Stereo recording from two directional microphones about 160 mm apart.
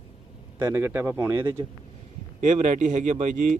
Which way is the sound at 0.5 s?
15° right (ahead or behind).